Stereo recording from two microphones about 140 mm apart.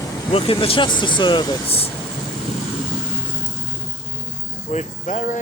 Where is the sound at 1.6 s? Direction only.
45° left (ahead or behind).